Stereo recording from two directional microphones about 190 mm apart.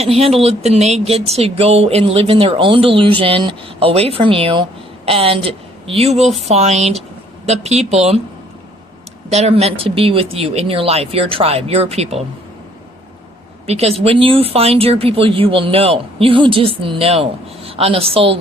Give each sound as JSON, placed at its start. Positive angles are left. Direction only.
{"t": 0.0, "sound": "speech", "side_deg": -30}
{"t": 9.3, "sound": "speech", "side_deg": -35}
{"t": 13.7, "sound": "speech", "side_deg": -35}